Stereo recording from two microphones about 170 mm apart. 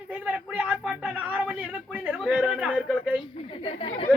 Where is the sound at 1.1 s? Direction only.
10° right (ahead or behind).